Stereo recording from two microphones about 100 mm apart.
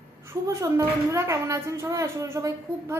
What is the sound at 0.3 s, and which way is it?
A woman's voice, 30° right (ahead or behind).